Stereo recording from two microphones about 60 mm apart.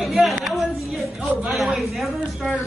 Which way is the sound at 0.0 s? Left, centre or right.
Centre.